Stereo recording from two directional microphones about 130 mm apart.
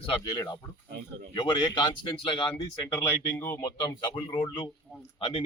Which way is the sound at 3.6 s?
30° left (ahead or behind).